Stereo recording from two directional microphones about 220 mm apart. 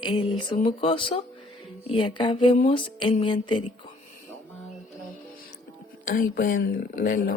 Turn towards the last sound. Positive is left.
turn(degrees=40)  # may be behind; listen again after turning